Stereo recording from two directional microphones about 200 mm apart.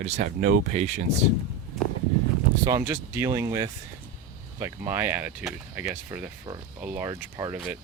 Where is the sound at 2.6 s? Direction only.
15° right (ahead or behind).